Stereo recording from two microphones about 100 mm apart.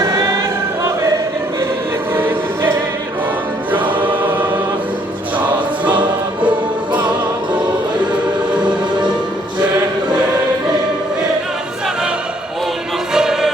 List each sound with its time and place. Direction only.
0.0 s choir: 30° right (ahead or behind)
2.1 s music: 20° right (ahead or behind)
4.1 s music: 15° right (ahead or behind)
13.1 s music: 5° right (ahead or behind)